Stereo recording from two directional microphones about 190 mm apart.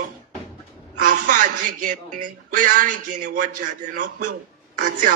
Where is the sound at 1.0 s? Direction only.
45° right (ahead or behind).